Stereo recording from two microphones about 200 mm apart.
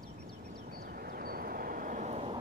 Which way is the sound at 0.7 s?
45° right (ahead or behind).